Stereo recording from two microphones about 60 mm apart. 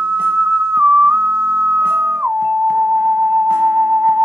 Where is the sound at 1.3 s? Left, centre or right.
Centre.